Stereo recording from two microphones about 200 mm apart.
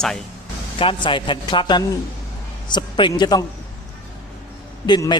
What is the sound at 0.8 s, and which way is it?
A man's voice, 25° left (ahead or behind).